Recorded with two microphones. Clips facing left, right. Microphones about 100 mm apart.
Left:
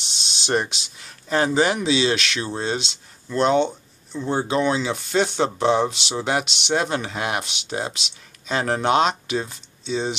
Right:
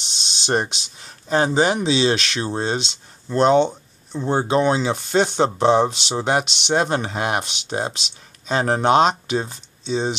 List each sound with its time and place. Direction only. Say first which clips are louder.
0.5 s speech: right 1 dB; 35° right (ahead or behind)
6.4 s speech: even; 5° left (ahead or behind)
6.7 s speech: right 3 dB; 35° right (ahead or behind)